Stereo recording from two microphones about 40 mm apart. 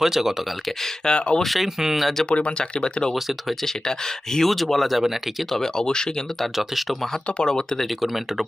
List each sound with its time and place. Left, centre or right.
0.0 s speech: centre
1.0 s speech: left
1.4 s speech: centre
2.6 s speech: left; by 5.5 s centre
5.5 s speech: centre
6.4 s speech: centre
7.3 s speech: left
7.9 s speech: centre